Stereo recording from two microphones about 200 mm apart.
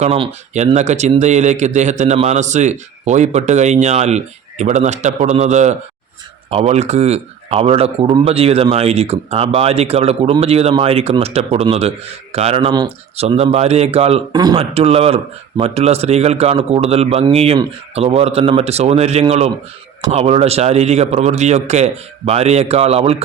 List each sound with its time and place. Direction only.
0.0 s speech: 30° right (ahead or behind)